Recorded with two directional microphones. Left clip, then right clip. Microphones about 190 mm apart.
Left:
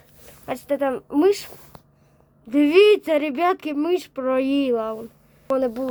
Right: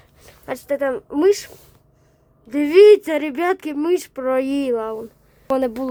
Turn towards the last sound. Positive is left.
turn(degrees=-25)  # may be behind; listen again after turning